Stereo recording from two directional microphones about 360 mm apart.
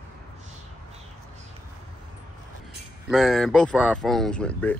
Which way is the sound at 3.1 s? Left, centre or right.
Centre.